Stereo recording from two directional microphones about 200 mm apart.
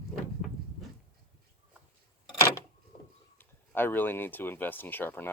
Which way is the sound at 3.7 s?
10° left (ahead or behind).